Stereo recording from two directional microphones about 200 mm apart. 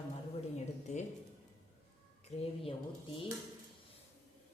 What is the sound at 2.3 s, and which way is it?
Speech, 25° left (ahead or behind).